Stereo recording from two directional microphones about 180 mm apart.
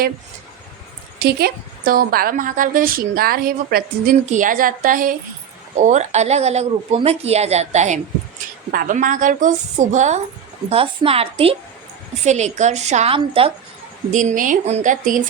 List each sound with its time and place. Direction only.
1.2 s a woman's voice: 60° right (ahead or behind); by 13.5 s 30° right (ahead or behind)
14.1 s speech: 45° right (ahead or behind)